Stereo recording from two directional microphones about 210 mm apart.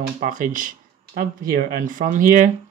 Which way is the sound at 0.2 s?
40° right (ahead or behind).